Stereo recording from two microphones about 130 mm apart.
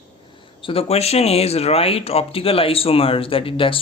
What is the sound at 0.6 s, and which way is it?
Speech, 45° left (ahead or behind).